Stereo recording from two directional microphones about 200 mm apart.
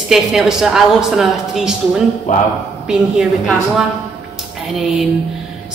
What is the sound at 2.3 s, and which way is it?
Speech, 40° left (ahead or behind).